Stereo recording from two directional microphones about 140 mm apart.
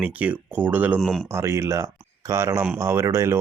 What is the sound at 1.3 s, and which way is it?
Speech, 20° right (ahead or behind).